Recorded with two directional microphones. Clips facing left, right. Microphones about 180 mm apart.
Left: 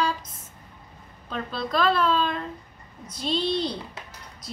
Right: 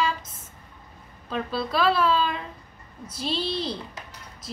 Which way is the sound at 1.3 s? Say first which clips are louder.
Right 1 dB; 5° right (ahead or behind).